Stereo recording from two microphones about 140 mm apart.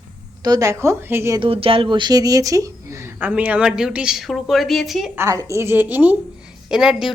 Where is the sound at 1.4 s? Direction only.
40° right (ahead or behind); by 5.1 s centre (ahead or behind).